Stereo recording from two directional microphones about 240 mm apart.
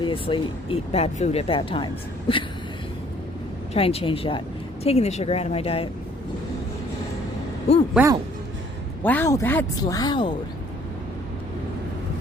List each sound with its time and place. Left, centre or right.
0.0 s speech: left
3.8 s speech: left
7.9 s speech: centre
9.0 s speech: centre